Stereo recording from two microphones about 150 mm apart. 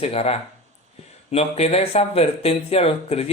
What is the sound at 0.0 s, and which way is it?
Speech, 40° left (ahead or behind).